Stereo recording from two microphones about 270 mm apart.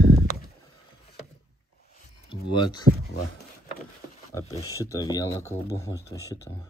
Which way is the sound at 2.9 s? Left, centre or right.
Right.